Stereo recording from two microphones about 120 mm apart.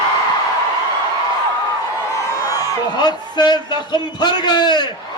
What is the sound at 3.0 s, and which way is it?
A man's voice, 35° left (ahead or behind).